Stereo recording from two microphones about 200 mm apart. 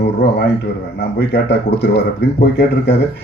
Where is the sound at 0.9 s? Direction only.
55° left (ahead or behind).